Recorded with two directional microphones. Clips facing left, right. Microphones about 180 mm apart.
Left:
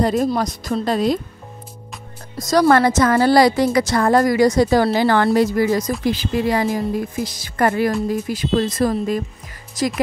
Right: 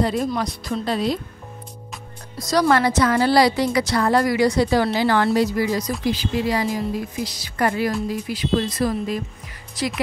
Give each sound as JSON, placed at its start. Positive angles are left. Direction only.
{"t": 0.0, "sound": "a woman's voice", "side_deg": 45}
{"t": 2.3, "sound": "a woman's voice", "side_deg": 45}